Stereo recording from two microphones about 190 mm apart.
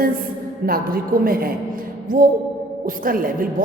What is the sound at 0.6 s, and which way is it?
A woman's voice, 50° right (ahead or behind).